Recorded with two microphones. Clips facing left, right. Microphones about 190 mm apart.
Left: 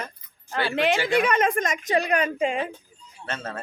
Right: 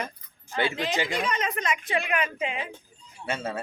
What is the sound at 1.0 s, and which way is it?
Speech, 60° left (ahead or behind).